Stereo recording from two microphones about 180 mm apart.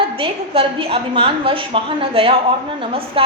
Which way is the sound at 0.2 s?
30° right (ahead or behind).